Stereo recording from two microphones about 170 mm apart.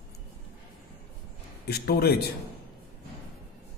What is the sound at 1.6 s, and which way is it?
Speech, 70° left (ahead or behind).